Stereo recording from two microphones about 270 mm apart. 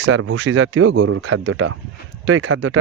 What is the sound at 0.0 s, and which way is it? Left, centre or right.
Speech, right.